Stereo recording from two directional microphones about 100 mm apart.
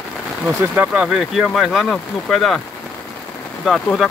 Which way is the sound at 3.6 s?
Centre (ahead or behind).